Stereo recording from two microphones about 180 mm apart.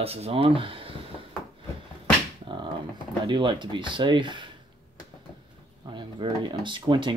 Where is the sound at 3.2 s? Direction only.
25° right (ahead or behind).